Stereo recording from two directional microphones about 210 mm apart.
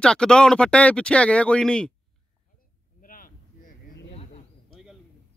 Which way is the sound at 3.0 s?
40° left (ahead or behind).